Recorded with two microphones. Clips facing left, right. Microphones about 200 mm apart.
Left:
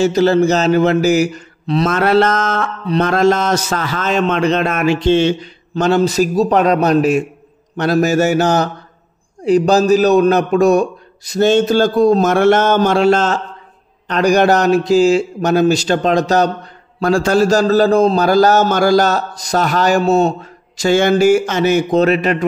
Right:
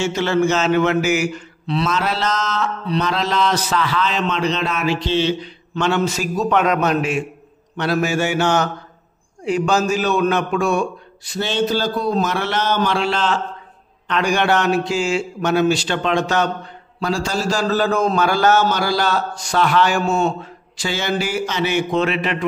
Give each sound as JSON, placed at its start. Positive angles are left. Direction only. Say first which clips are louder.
{"t": 0.0, "sound": "a man's voice", "louder": "left 6 dB", "side_deg": 35}
{"t": 17.0, "sound": "a man's voice", "louder": "left 9 dB", "side_deg": 55}